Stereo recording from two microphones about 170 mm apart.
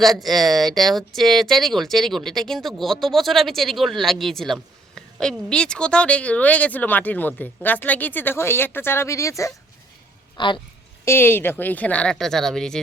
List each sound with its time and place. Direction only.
0.0 s speech: centre (ahead or behind); by 10.6 s 30° left (ahead or behind)
11.0 s speech: 15° left (ahead or behind)